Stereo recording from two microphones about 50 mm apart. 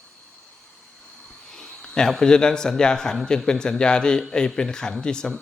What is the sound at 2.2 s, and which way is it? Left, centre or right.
Speech, centre.